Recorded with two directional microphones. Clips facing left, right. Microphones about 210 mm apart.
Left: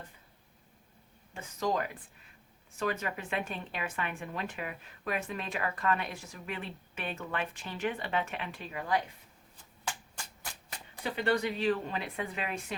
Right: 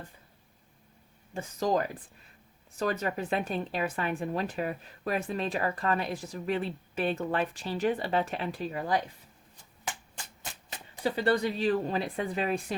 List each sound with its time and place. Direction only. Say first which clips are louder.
1.3 s speech: right 4 dB; 35° right (ahead or behind)
11.0 s speech: right 4 dB; 35° right (ahead or behind)